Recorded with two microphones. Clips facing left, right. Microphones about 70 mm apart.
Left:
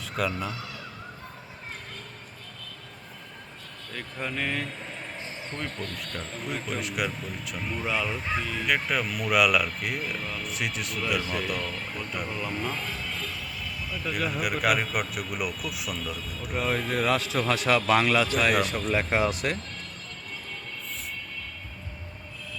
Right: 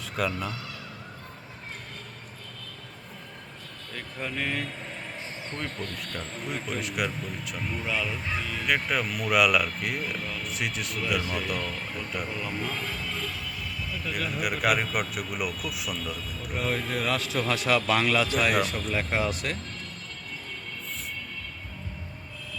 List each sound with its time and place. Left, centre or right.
0.0 s speech: centre
3.9 s speech: centre
14.0 s speech: centre
18.9 s speech: centre